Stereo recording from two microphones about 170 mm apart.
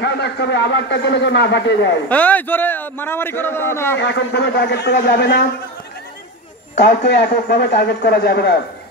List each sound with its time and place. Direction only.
0.0 s a man's voice: 90° left
2.0 s a man's voice: 10° left (ahead or behind)
4.0 s a man's voice: 85° left
6.8 s a man's voice: 60° left (ahead or behind)